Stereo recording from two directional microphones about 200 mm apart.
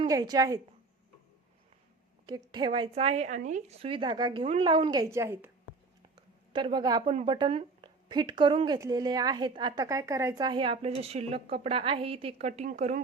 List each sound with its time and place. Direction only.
0.0 s a woman's voice: 20° right (ahead or behind)
2.2 s a woman's voice: 20° right (ahead or behind)
6.5 s a woman's voice: 25° right (ahead or behind)
7.0 s a woman's voice: 35° right (ahead or behind)